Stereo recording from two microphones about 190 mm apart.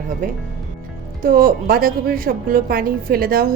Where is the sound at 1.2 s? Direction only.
50° right (ahead or behind).